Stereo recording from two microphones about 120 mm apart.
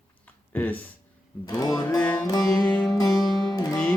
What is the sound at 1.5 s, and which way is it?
Music, 30° left (ahead or behind).